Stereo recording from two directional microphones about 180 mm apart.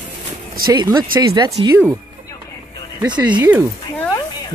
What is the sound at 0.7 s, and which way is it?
Speech, 20° right (ahead or behind).